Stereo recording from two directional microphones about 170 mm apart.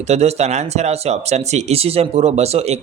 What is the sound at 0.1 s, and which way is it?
Speech, 40° right (ahead or behind).